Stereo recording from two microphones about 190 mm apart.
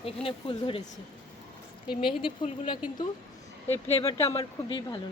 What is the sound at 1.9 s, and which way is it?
Speech, 25° left (ahead or behind).